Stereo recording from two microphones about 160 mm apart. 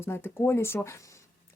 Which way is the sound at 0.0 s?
15° left (ahead or behind).